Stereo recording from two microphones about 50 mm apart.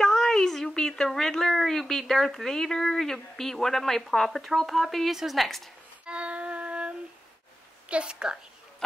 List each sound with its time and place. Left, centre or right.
0.0 s a sound: centre
0.7 s a woman's voice: centre
6.0 s music: right
7.9 s a woman's voice: centre